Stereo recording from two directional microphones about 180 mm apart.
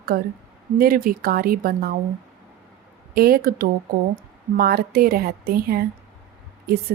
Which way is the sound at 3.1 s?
60° right (ahead or behind).